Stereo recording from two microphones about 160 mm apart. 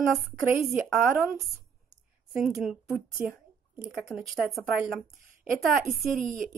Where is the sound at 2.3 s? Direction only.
5° right (ahead or behind).